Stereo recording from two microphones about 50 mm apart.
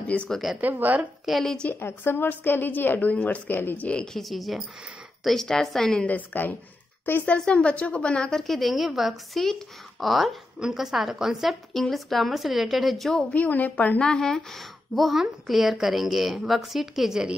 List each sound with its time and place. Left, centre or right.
0.1 s a woman's voice: left
0.6 s a woman's voice: right
1.2 s a woman's voice: centre
1.8 s a woman's voice: left
3.8 s a woman's voice: left
4.1 s a woman's voice: centre
6.0 s a woman's voice: left
7.2 s a woman's voice: left
8.5 s a woman's voice: centre
11.7 s a woman's voice: centre
13.3 s a woman's voice: left
13.9 s a woman's voice: centre